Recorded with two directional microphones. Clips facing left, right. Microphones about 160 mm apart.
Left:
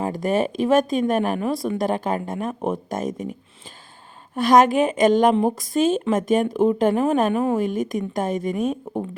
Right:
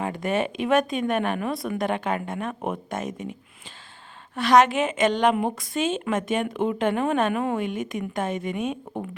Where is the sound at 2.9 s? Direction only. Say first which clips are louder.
Left 4 dB; 40° left (ahead or behind).